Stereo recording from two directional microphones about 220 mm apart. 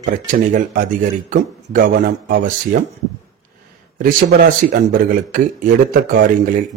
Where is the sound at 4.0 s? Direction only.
40° right (ahead or behind).